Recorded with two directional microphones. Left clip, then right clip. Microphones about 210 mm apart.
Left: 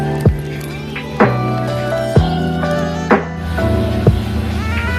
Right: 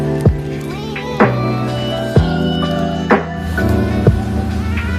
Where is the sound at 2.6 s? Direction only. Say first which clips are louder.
Left 2 dB; centre (ahead or behind).